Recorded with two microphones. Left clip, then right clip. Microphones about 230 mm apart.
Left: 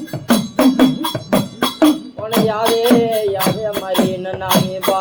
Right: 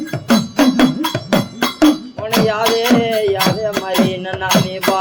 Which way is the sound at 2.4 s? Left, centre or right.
Right.